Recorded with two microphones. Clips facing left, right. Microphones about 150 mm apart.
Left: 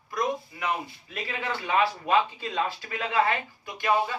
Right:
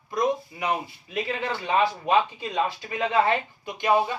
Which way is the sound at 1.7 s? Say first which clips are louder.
Right 2 dB; 20° right (ahead or behind).